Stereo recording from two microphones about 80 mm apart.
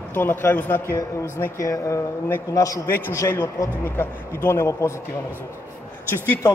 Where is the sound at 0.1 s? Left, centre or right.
Left.